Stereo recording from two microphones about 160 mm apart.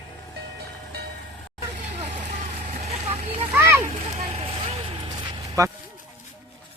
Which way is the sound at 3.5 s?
15° right (ahead or behind).